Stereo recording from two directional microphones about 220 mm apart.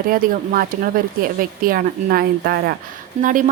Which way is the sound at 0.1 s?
40° right (ahead or behind).